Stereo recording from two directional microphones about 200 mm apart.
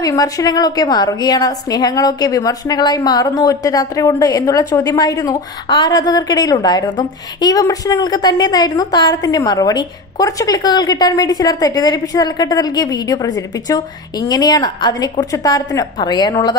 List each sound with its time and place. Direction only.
0.0 s a woman's voice: 20° left (ahead or behind)